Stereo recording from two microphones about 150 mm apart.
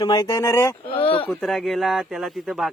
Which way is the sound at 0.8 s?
40° left (ahead or behind).